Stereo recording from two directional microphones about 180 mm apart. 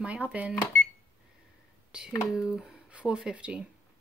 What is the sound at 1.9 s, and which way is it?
Speech, 5° right (ahead or behind).